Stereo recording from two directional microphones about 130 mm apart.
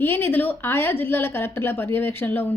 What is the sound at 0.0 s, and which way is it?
A woman's voice, 15° left (ahead or behind).